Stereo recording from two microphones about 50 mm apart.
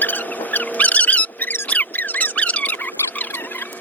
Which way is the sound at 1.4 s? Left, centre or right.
Left.